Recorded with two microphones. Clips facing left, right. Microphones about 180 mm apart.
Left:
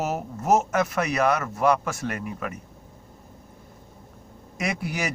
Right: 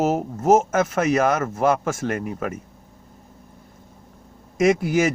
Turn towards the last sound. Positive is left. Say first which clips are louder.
# right 11 dB
turn(degrees=-45)  # may be behind; listen again after turning